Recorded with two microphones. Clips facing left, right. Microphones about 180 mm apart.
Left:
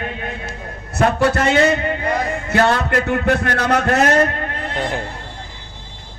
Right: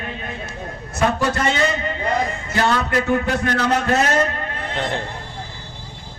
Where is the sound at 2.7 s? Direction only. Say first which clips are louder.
Even; 60° left (ahead or behind).